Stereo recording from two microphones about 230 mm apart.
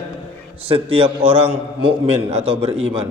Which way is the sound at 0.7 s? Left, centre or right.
Right.